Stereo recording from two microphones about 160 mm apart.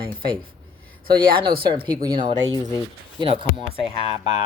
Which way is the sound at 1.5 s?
75° right (ahead or behind).